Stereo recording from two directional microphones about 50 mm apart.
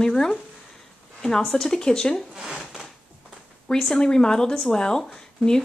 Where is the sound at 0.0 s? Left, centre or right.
Centre.